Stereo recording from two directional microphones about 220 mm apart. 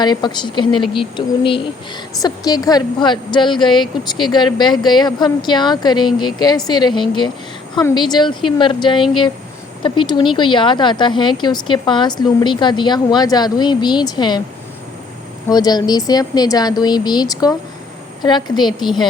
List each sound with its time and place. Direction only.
0.0 s speech: 20° left (ahead or behind)
15.4 s speech: 15° left (ahead or behind)
18.8 s speech: centre (ahead or behind)